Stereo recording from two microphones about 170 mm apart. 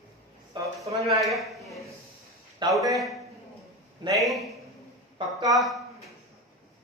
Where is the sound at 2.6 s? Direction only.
25° right (ahead or behind).